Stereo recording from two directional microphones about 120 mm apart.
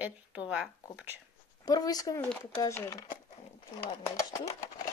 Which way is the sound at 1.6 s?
30° left (ahead or behind).